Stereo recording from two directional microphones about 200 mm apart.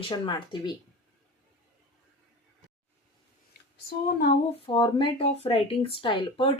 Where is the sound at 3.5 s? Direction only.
50° left (ahead or behind).